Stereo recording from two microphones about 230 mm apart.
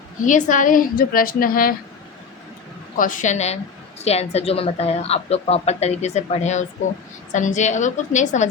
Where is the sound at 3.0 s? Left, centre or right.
Left.